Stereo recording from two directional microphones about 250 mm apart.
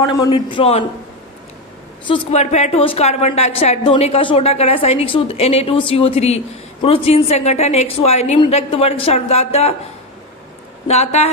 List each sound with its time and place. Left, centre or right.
0.0 s a woman's voice: centre
2.0 s a woman's voice: left
10.9 s a woman's voice: left